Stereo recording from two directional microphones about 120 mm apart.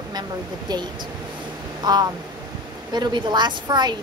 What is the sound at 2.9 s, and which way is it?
A woman's voice, 35° right (ahead or behind).